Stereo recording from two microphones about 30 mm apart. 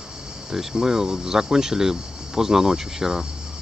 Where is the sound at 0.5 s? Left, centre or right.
Centre.